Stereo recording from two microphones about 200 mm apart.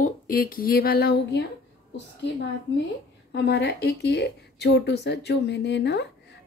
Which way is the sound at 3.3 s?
60° left (ahead or behind).